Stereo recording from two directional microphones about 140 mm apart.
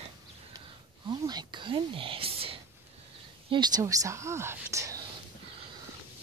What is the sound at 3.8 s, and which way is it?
Speech, 25° right (ahead or behind).